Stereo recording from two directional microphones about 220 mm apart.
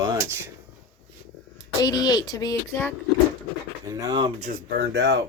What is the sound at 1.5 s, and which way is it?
Speech, 20° left (ahead or behind).